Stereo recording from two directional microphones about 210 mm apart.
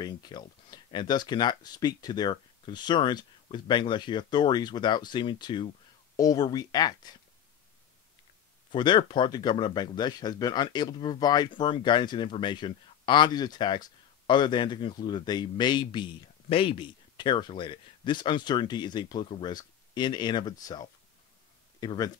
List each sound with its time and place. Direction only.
0.0 s speech: 20° left (ahead or behind)
8.7 s speech: 20° left (ahead or behind)